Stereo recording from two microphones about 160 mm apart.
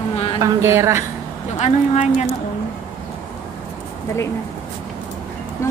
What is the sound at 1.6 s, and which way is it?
Speech, 45° left (ahead or behind).